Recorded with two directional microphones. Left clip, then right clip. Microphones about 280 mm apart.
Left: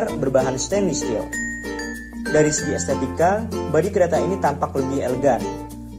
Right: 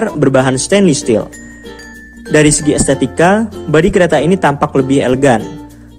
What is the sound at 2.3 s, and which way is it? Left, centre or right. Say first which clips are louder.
Speech: right 9 dB; right.